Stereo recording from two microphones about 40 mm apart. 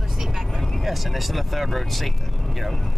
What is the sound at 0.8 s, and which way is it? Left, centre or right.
Speech, centre.